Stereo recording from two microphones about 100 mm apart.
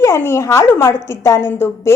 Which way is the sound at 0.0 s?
25° left (ahead or behind).